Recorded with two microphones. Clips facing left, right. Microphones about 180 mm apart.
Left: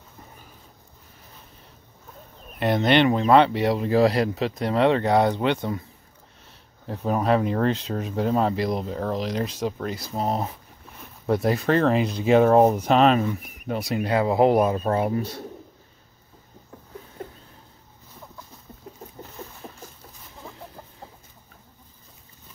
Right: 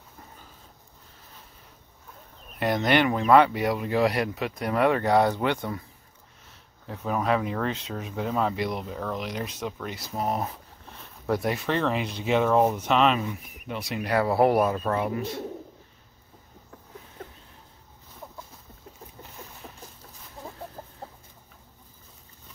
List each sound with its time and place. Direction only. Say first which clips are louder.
2.6 s speech: left 3 dB; 25° left (ahead or behind)
6.9 s speech: left 4 dB; 35° left (ahead or behind)
11.5 s speech: left 6 dB; 40° left (ahead or behind)
14.0 s speech: left 2 dB; 20° left (ahead or behind)
14.8 s speech: left 4 dB; 30° left (ahead or behind)